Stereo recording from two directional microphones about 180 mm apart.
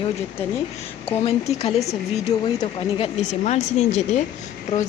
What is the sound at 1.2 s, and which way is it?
Speech, 35° left (ahead or behind).